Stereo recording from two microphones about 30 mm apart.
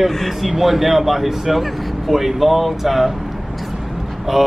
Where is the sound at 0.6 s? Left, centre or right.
Centre.